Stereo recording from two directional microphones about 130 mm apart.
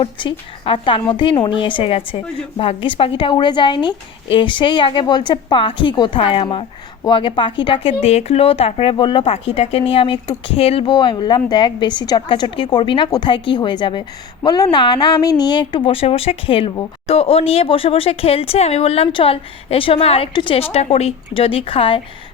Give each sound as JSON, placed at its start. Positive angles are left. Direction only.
{"t": 0.0, "sound": "speech", "side_deg": 40}
{"t": 8.0, "sound": "speech", "side_deg": 55}